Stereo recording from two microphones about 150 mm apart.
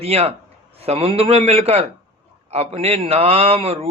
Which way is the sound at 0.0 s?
40° right (ahead or behind).